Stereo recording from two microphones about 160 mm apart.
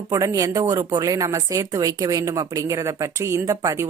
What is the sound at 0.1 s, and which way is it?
A woman's voice, 20° right (ahead or behind).